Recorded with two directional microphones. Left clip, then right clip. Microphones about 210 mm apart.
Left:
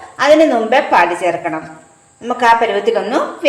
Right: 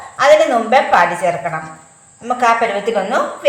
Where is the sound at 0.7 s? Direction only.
45° left (ahead or behind).